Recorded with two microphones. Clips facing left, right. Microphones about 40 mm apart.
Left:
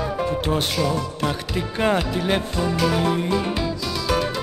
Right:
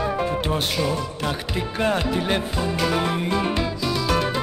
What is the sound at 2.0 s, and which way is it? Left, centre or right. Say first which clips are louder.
Music: even; centre.